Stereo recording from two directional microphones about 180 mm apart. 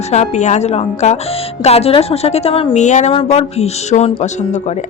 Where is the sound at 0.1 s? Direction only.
40° left (ahead or behind).